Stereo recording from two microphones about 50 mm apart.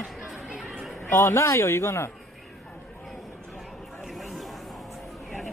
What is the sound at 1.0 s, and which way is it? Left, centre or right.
Speech, left.